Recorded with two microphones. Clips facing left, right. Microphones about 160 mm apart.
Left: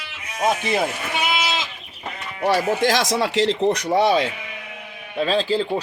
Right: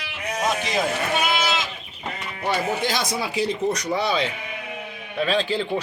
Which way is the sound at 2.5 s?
90° left.